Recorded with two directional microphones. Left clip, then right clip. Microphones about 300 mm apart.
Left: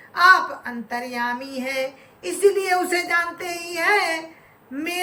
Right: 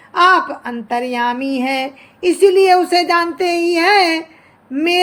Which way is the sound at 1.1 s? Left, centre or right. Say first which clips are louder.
Right 8 dB; centre.